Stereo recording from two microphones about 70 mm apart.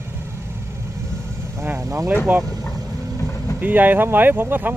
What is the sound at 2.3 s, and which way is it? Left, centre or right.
Speech, right.